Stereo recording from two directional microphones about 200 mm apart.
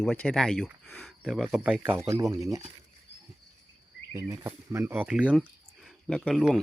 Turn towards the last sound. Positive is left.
turn(degrees=0)  # may be behind; listen again after turning